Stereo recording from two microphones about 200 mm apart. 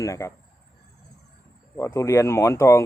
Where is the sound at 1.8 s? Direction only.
15° left (ahead or behind).